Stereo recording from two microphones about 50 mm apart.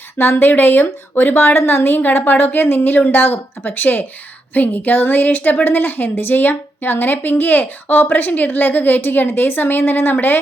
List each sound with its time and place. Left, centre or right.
0.2 s a woman's voice: left